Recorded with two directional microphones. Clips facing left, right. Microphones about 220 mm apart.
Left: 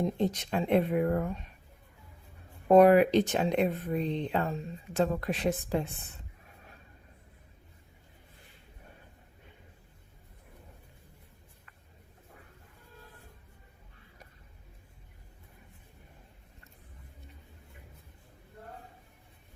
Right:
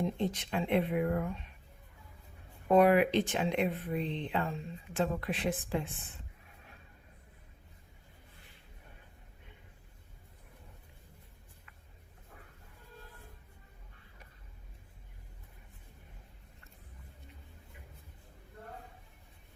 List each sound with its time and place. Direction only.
0.0 s speech: 40° left (ahead or behind)
2.6 s speech: 40° left (ahead or behind)